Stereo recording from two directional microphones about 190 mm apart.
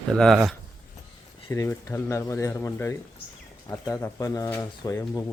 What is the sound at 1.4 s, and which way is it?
Speech, 15° left (ahead or behind).